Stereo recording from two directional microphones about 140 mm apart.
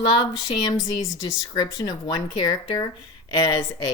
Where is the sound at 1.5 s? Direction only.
30° left (ahead or behind).